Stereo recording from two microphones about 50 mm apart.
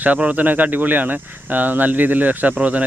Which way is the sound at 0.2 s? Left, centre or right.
Right.